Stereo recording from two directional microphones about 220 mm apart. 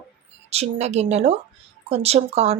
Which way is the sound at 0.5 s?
30° right (ahead or behind).